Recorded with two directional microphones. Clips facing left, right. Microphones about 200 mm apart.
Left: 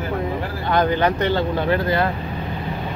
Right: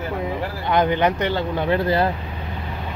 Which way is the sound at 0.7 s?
20° right (ahead or behind).